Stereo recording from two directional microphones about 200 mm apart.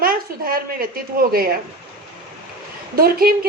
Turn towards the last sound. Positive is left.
turn(degrees=-50)  # may be behind; listen again after turning